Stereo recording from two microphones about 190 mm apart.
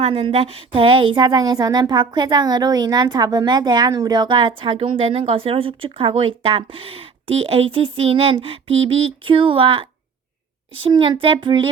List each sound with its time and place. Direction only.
0.0 s a woman's voice: 30° right (ahead or behind)
10.8 s a woman's voice: 25° right (ahead or behind)